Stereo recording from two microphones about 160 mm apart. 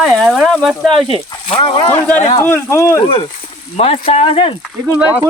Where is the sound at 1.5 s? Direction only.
30° left (ahead or behind).